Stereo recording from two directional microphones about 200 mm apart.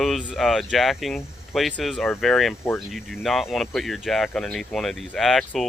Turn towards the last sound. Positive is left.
turn(degrees=0)  # may be behind; listen again after turning